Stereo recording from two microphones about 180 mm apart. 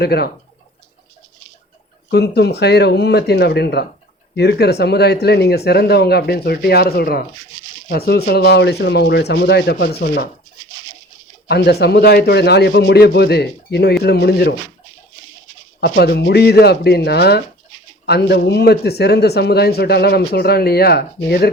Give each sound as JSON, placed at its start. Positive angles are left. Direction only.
{"t": 0.0, "sound": "speech", "side_deg": 65}
{"t": 2.0, "sound": "speech", "side_deg": 65}
{"t": 11.4, "sound": "speech", "side_deg": 65}
{"t": 15.8, "sound": "speech", "side_deg": 60}